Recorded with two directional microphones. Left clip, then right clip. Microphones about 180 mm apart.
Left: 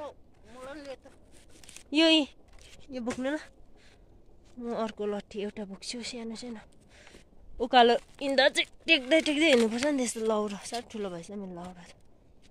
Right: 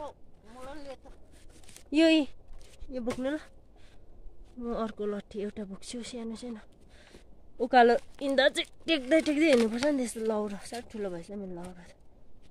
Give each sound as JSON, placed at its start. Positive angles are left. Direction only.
{"t": 0.7, "sound": "a sound", "side_deg": -35}
{"t": 1.9, "sound": "speech", "side_deg": 0}
{"t": 4.6, "sound": "speech", "side_deg": 0}